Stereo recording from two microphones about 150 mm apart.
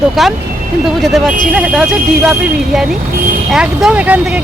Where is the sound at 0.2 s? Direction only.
Centre (ahead or behind).